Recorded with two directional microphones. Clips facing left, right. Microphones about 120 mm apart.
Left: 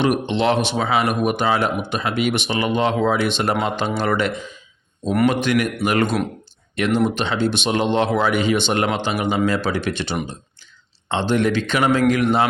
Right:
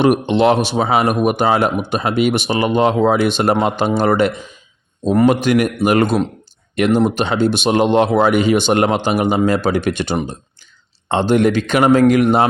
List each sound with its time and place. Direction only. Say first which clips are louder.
0.0 s speech: right 6 dB; 45° right (ahead or behind)
5.3 s speech: right 5 dB; 40° right (ahead or behind)
11.1 s speech: right 5 dB; 45° right (ahead or behind)